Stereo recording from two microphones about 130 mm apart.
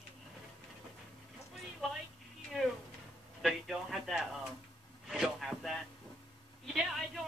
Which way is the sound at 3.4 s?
Centre (ahead or behind).